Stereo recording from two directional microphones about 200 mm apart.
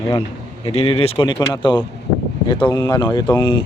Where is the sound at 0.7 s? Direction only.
30° left (ahead or behind).